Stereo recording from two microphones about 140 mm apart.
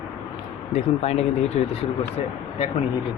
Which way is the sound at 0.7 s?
50° left (ahead or behind).